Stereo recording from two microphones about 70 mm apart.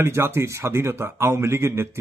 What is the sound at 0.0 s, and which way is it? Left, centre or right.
A man's voice, right.